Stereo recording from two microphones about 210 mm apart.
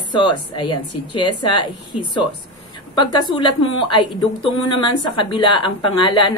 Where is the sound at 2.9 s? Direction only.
20° left (ahead or behind).